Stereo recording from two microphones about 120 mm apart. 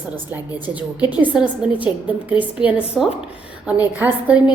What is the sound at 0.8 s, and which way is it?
A woman's voice, 10° right (ahead or behind).